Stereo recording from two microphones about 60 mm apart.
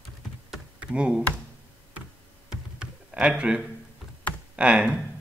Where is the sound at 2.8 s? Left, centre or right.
Centre.